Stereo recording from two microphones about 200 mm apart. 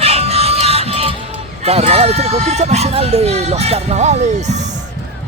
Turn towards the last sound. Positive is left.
turn(degrees=-35)  # may be behind; listen again after turning